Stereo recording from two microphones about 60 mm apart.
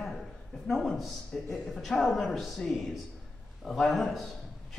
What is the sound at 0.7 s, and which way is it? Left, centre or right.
A man's voice, centre.